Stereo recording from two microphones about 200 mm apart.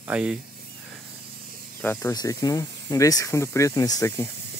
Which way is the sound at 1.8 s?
15° left (ahead or behind).